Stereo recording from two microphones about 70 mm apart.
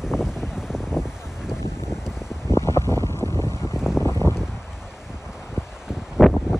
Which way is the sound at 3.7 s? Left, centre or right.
Centre.